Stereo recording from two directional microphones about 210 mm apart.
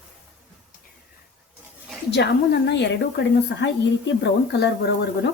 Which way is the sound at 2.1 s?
55° left (ahead or behind).